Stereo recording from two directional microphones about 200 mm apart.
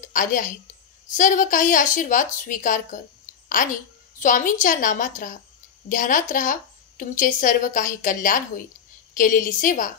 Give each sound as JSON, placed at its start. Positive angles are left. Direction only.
{"t": 0.0, "sound": "a woman's voice", "side_deg": 40}